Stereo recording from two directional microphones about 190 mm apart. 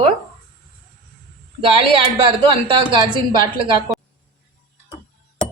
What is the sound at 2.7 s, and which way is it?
Speech, 25° right (ahead or behind).